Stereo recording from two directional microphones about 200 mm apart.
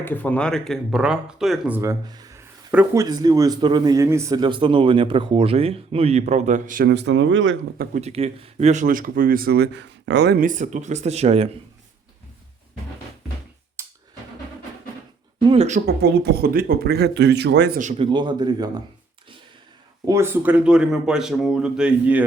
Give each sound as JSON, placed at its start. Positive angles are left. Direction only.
{"t": 0.0, "sound": "speech", "side_deg": 10}
{"t": 7.8, "sound": "speech", "side_deg": -35}
{"t": 10.4, "sound": "speech", "side_deg": -40}
{"t": 13.8, "sound": "a sound", "side_deg": -15}
{"t": 15.4, "sound": "speech", "side_deg": -35}
{"t": 15.9, "sound": "speech", "side_deg": -55}
{"t": 17.7, "sound": "speech", "side_deg": -40}
{"t": 18.0, "sound": "speech", "side_deg": -20}
{"t": 20.1, "sound": "speech", "side_deg": -15}